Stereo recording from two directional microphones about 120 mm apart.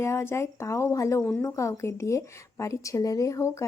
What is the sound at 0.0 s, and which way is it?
Speech, 20° left (ahead or behind).